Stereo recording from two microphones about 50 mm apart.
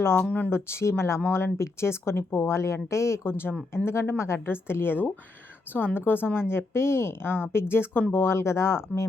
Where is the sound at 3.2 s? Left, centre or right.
Left.